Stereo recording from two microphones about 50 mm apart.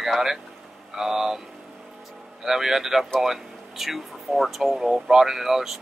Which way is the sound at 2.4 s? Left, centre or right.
Centre.